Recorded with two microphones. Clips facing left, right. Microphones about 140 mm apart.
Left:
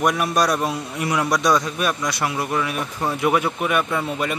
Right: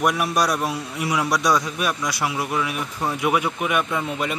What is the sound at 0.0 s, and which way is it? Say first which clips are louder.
A man's voice: left 1 dB; 5° right (ahead or behind).